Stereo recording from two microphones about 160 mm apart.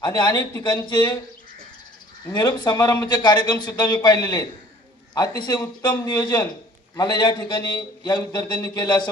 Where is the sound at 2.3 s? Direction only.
25° left (ahead or behind).